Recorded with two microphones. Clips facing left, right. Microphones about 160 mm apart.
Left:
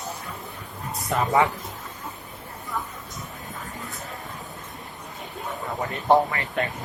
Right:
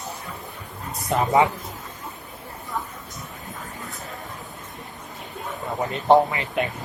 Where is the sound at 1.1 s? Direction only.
20° right (ahead or behind).